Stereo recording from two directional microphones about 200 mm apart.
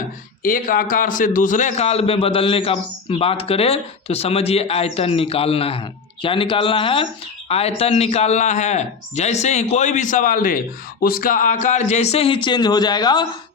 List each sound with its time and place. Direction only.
0.4 s a man's voice: 45° left (ahead or behind); by 13.2 s 20° left (ahead or behind)